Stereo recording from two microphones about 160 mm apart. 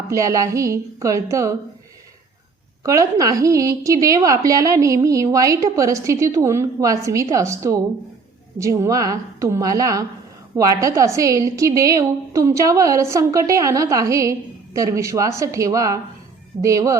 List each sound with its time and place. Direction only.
0.1 s a woman's voice: 20° right (ahead or behind)
2.8 s a woman's voice: 20° right (ahead or behind)